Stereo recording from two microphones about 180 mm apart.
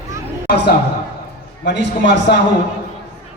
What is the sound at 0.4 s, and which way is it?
A man's voice, 70° left (ahead or behind).